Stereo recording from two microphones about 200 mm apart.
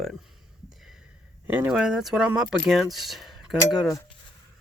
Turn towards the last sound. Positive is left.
turn(degrees=-5)  # may be behind; listen again after turning